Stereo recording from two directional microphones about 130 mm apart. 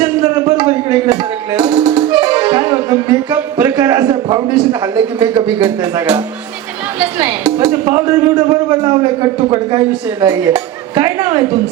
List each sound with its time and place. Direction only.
0.5 s music: 30° right (ahead or behind)
3.2 s a man's voice: 25° right (ahead or behind)